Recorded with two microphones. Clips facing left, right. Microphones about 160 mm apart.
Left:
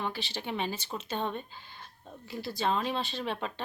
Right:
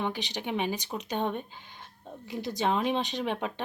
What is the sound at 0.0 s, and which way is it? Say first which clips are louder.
Speech: right 3 dB; 15° right (ahead or behind).